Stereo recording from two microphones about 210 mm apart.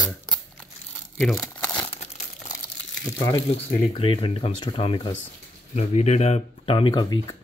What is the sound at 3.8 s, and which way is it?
Speech, 25° left (ahead or behind).